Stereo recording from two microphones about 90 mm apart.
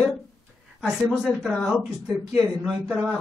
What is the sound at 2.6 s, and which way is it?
Speech, 15° right (ahead or behind).